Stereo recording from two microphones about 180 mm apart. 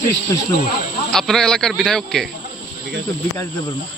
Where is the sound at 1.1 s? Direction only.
5° left (ahead or behind).